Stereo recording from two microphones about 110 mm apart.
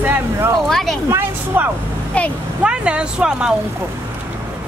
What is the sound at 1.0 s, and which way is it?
Speech, 20° right (ahead or behind).